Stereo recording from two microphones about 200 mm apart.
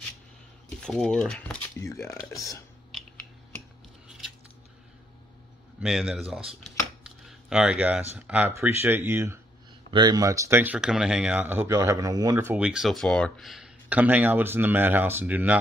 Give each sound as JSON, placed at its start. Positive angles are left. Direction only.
{"t": 0.8, "sound": "speech", "side_deg": 5}
{"t": 5.8, "sound": "speech", "side_deg": 0}